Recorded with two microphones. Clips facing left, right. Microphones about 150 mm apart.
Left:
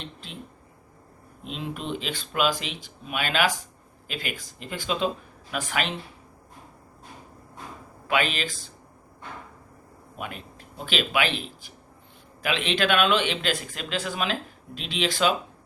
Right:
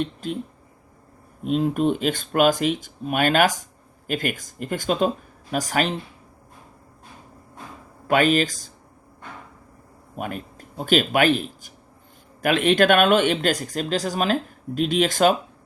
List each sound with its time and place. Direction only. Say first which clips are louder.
0.0 s speech: right 14 dB; 45° right (ahead or behind)
1.5 s speech: right 12 dB; 45° right (ahead or behind)
8.0 s speech: right 8 dB; 45° right (ahead or behind)
10.2 s a man's voice: right 6 dB; 45° right (ahead or behind)